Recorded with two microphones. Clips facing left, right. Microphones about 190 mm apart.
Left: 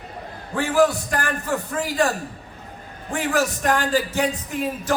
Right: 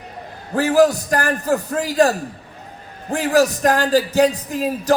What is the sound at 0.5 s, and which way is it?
Speech, 40° right (ahead or behind).